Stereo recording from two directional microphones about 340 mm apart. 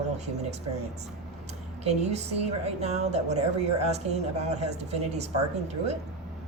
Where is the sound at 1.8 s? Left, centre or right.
Centre.